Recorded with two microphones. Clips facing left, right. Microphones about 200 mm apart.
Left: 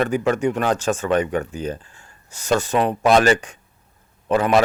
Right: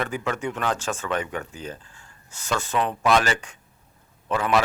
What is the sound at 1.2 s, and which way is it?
Speech, 50° left (ahead or behind).